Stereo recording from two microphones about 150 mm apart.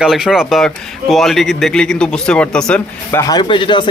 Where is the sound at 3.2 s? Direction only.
30° left (ahead or behind).